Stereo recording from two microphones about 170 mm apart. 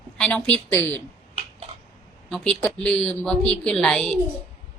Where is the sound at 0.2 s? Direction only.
5° left (ahead or behind).